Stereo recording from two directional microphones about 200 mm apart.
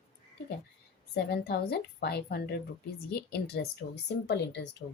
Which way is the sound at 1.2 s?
50° left (ahead or behind).